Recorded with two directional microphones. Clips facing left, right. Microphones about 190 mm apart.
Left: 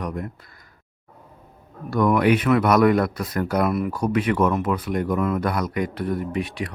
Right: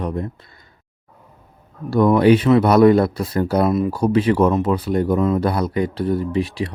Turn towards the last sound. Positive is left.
turn(degrees=-30)  # may be behind; listen again after turning